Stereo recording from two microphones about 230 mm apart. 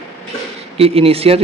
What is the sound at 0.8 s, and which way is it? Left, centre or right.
Speech, right.